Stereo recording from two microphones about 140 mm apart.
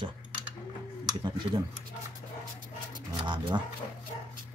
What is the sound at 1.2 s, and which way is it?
Speech, 35° right (ahead or behind).